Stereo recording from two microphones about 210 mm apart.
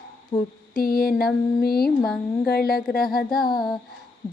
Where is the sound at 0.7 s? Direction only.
45° left (ahead or behind).